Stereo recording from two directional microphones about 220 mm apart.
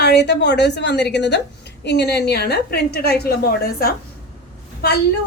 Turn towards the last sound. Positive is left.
turn(degrees=45)  # may be behind; listen again after turning